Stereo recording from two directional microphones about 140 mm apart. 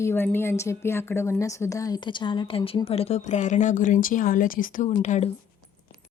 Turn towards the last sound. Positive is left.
turn(degrees=55)  # may be behind; listen again after turning